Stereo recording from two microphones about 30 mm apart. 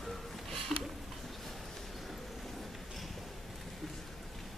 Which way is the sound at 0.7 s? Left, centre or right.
Centre.